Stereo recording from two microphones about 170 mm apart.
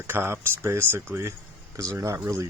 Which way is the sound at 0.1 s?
15° right (ahead or behind).